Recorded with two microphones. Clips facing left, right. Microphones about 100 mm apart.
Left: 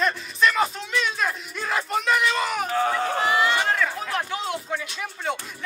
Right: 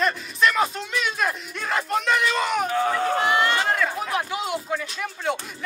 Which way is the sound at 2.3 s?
Centre (ahead or behind).